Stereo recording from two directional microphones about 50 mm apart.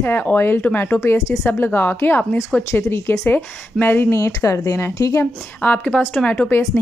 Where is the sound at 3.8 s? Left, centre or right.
Left.